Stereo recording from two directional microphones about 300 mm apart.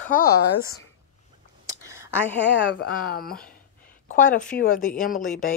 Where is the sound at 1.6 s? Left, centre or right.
Centre.